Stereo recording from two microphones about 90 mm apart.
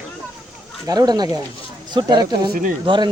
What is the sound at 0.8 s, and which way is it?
Speech, 50° right (ahead or behind).